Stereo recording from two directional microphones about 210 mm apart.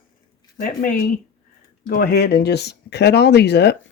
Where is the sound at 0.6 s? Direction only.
45° left (ahead or behind).